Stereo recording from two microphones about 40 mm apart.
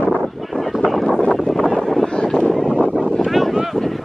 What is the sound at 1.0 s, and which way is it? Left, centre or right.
Wind noise, centre.